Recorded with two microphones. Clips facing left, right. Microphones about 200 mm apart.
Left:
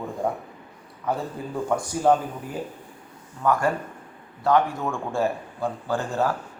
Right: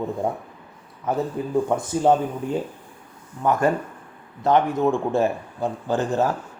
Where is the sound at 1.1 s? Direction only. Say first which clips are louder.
Right 4 dB; 20° right (ahead or behind).